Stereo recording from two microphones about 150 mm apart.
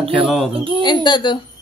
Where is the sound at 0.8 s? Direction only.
30° left (ahead or behind).